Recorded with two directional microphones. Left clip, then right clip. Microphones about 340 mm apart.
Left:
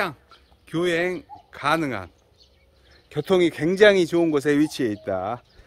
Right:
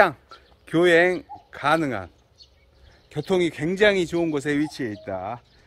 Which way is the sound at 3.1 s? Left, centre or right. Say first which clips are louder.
Left 3 dB; centre.